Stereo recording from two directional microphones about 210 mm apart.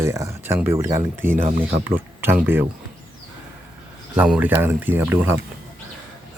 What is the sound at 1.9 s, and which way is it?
Speech, 10° right (ahead or behind).